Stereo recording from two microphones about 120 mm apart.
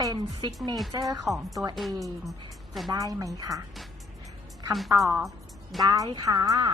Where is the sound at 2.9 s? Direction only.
30° right (ahead or behind).